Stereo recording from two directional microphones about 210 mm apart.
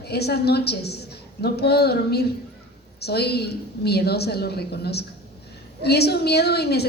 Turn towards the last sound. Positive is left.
turn(degrees=50)  # may be behind; listen again after turning